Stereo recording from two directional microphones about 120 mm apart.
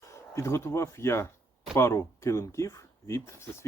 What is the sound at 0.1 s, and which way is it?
Speech, 25° left (ahead or behind).